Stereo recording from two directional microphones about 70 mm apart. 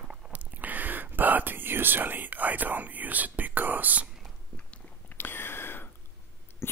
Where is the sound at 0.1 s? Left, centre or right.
Centre.